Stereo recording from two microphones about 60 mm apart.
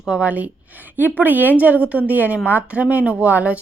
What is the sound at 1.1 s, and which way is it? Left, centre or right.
Speech, right.